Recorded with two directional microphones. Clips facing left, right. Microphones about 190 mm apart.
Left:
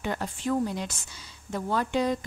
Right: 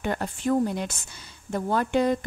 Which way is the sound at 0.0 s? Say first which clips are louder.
Right 3 dB; 50° right (ahead or behind).